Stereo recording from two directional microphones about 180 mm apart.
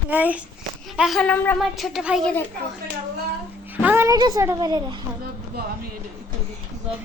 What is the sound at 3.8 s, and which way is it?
A woman's voice, 10° right (ahead or behind).